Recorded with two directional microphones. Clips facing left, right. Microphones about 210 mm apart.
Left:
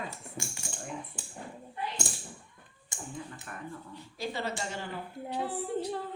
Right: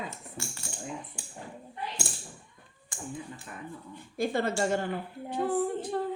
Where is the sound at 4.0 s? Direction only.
50° right (ahead or behind).